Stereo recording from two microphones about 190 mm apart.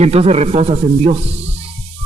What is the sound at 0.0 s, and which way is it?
Speech, 35° right (ahead or behind).